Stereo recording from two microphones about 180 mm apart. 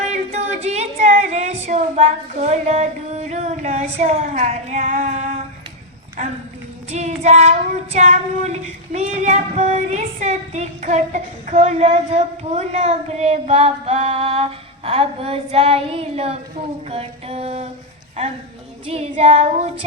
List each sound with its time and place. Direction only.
0.0 s female singing: 40° right (ahead or behind)
6.9 s child singing: 40° right (ahead or behind)
18.9 s child singing: 35° right (ahead or behind)